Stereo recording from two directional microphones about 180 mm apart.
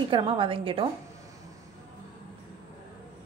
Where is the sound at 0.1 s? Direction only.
30° right (ahead or behind).